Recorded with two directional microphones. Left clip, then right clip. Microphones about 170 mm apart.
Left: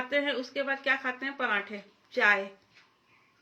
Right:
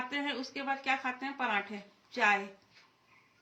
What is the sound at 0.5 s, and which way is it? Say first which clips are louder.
A man's voice: left 3 dB; 15° right (ahead or behind).